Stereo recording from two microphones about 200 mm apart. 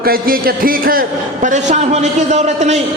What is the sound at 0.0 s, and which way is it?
A man's voice, 45° right (ahead or behind).